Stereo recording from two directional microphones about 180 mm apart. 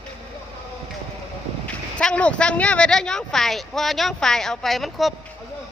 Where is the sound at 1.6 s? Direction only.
5° left (ahead or behind).